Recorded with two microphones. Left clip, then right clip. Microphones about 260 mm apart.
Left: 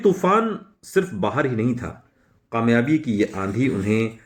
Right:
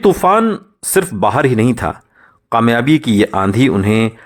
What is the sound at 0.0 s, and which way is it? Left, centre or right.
Speech, right.